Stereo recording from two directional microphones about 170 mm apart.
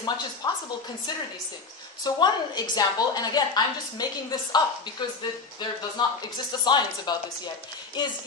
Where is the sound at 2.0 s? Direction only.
25° left (ahead or behind).